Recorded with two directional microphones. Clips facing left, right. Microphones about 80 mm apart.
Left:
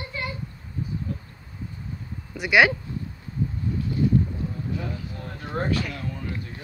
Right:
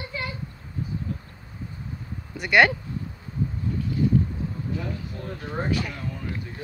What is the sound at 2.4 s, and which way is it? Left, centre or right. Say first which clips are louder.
Speech: even; centre.